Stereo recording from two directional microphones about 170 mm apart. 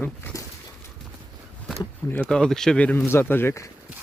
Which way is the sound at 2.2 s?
5° left (ahead or behind).